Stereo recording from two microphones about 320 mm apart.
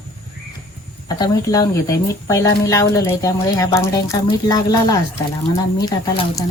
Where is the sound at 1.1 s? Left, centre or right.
Centre.